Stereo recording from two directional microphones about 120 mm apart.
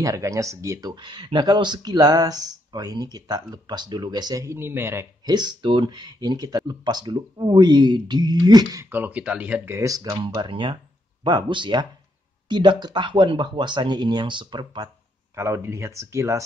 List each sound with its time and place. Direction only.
0.0 s speech: 25° right (ahead or behind)
5.2 s speech: 35° right (ahead or behind)
8.9 s speech: 15° right (ahead or behind)
9.8 s speech: 30° right (ahead or behind)
15.3 s speech: 25° right (ahead or behind)